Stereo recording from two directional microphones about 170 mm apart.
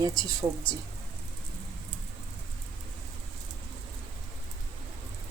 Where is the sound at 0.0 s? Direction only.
20° right (ahead or behind).